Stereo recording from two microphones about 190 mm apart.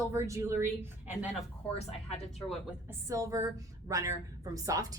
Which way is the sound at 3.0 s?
15° right (ahead or behind).